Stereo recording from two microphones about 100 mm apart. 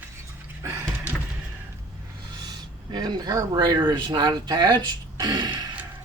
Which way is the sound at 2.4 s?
45° right (ahead or behind).